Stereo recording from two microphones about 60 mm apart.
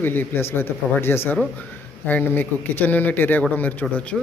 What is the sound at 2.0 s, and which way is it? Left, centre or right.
Speech, left.